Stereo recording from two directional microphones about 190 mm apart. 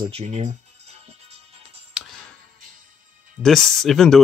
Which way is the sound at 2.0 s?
5° right (ahead or behind).